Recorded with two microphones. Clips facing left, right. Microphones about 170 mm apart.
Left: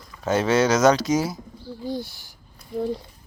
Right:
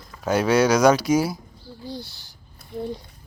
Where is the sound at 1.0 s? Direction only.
20° left (ahead or behind).